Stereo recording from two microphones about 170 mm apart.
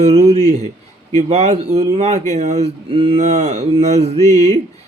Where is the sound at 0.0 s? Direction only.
40° right (ahead or behind).